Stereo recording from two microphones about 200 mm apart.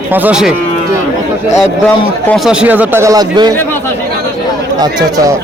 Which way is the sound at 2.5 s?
5° right (ahead or behind).